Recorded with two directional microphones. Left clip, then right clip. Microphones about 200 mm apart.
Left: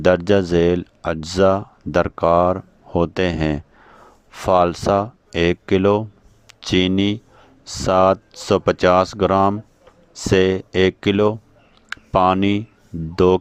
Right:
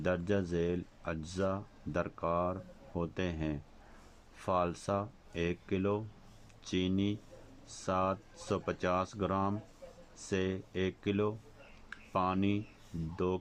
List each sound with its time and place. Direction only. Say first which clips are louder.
0.0 s speech: left 18 dB; 45° left (ahead or behind)